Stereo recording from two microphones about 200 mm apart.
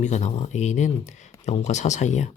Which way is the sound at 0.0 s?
35° left (ahead or behind).